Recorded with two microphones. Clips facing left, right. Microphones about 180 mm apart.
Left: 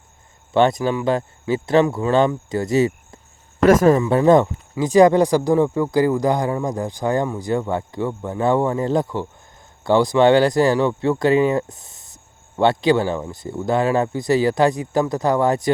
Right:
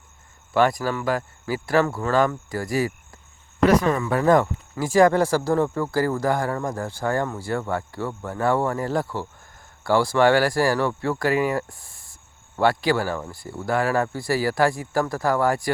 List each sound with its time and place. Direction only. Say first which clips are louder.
0.5 s speech: left 4 dB; 25° left (ahead or behind)
3.6 s speech: left 5 dB; 45° left (ahead or behind)
3.9 s speech: left 5 dB; 25° left (ahead or behind)